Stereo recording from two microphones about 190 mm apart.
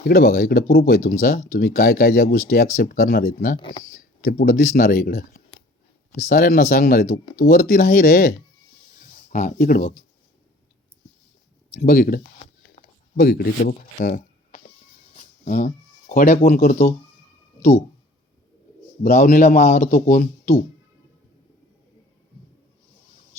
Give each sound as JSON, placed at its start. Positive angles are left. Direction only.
{"t": 0.0, "sound": "speech", "side_deg": 50}
{"t": 3.6, "sound": "speech", "side_deg": 25}
{"t": 3.8, "sound": "speech", "side_deg": 50}
{"t": 6.2, "sound": "speech", "side_deg": 50}
{"t": 11.8, "sound": "speech", "side_deg": 50}
{"t": 12.7, "sound": "a sound", "side_deg": 55}
{"t": 15.1, "sound": "speech", "side_deg": 40}
{"t": 19.1, "sound": "speech", "side_deg": 40}